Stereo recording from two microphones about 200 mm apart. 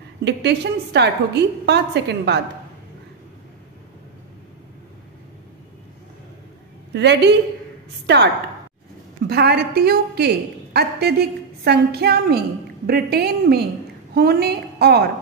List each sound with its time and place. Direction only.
0.2 s a woman's voice: 55° right (ahead or behind)
6.9 s a woman's voice: 60° right (ahead or behind)
9.3 s a woman's voice: 55° right (ahead or behind)